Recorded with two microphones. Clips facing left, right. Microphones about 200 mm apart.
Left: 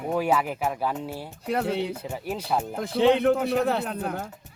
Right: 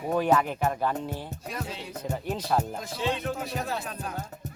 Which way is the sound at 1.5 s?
65° left (ahead or behind).